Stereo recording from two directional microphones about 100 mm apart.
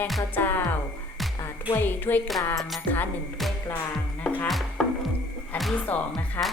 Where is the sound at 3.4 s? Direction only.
Centre (ahead or behind).